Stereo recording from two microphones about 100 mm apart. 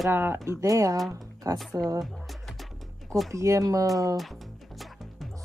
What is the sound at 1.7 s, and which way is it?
Speech, 40° right (ahead or behind).